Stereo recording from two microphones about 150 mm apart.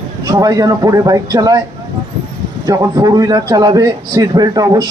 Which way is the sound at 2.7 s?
25° right (ahead or behind).